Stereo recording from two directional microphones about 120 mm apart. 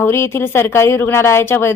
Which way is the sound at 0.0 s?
20° left (ahead or behind).